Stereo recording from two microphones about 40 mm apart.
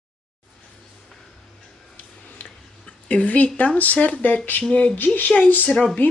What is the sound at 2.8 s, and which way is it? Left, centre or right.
Speech, left.